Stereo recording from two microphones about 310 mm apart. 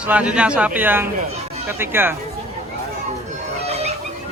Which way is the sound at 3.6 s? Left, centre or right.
Centre.